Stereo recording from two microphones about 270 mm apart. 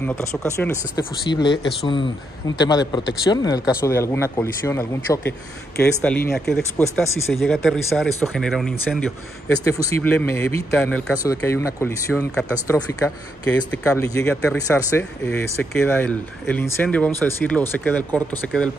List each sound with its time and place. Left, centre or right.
0.0 s speech: centre